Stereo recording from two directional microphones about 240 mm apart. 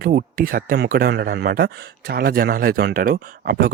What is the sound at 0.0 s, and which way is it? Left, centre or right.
Speech, right.